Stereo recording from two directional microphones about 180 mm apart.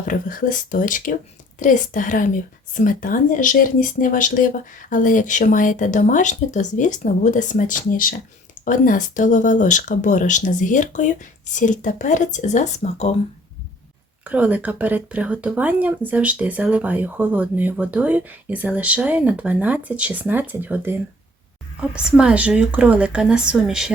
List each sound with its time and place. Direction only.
0.0 s speech: 50° left (ahead or behind)
14.3 s speech: 10° right (ahead or behind)
21.9 s a woman's voice: 5° right (ahead or behind)